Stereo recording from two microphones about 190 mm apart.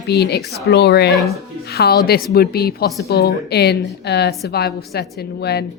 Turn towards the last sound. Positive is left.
turn(degrees=60)  # may be behind; listen again after turning